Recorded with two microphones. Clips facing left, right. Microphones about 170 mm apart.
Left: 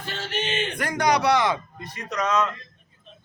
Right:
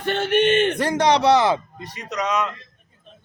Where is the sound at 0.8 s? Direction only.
30° right (ahead or behind).